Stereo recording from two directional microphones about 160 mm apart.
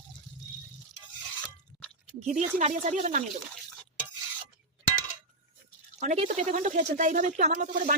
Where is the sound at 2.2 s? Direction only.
45° right (ahead or behind).